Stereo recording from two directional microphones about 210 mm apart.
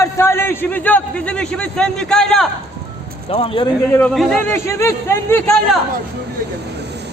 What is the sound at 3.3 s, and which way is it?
Music, 25° left (ahead or behind).